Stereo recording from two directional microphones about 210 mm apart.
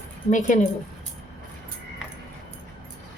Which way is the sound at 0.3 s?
35° left (ahead or behind).